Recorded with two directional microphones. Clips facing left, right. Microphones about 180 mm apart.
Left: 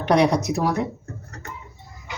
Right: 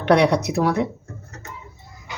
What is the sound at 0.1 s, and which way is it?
Speech, 65° right (ahead or behind).